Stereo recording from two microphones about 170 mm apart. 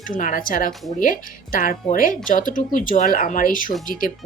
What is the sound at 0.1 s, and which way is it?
Speech, 50° left (ahead or behind).